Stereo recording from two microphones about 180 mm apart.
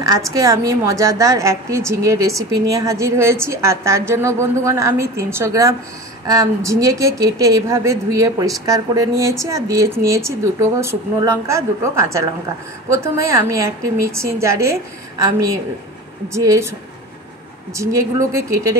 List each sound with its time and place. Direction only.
0.0 s a woman's voice: 20° right (ahead or behind)
17.7 s a woman's voice: 15° right (ahead or behind)